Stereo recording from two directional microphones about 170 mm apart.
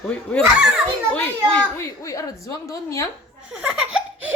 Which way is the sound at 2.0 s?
20° left (ahead or behind).